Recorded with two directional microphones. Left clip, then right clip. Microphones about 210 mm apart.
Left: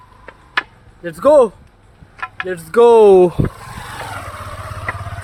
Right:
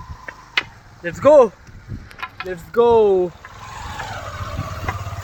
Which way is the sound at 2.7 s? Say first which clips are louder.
Left 6 dB; 55° left (ahead or behind).